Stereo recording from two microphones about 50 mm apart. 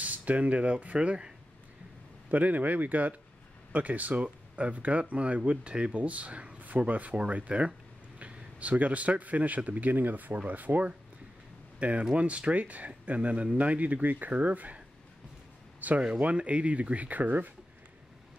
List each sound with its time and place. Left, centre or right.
0.0 s speech: right
2.3 s speech: right
15.8 s speech: right